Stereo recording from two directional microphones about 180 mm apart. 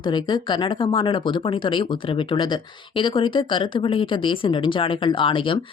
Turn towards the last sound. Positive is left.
turn(degrees=30)  # may be behind; listen again after turning